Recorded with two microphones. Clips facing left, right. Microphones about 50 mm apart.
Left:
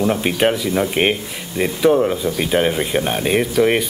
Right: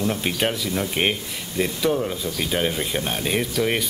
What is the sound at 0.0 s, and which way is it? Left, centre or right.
A woman's voice, left.